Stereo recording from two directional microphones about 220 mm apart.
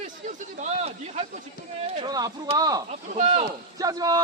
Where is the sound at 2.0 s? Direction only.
15° right (ahead or behind).